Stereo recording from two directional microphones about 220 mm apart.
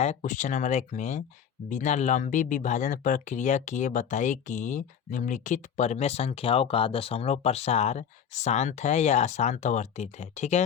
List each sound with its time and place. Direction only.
0.0 s speech: 35° left (ahead or behind)